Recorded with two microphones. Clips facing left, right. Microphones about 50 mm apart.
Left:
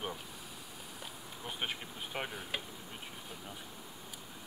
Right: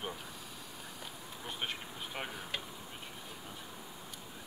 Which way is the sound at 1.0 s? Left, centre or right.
Centre.